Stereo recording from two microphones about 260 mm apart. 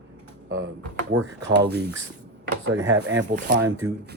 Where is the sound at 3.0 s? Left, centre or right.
Right.